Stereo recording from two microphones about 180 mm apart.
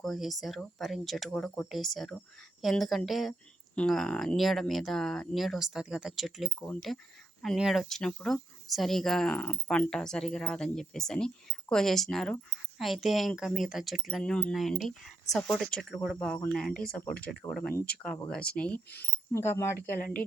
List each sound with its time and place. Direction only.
0.0 s speech: centre (ahead or behind)
20.0 s speech: 50° left (ahead or behind)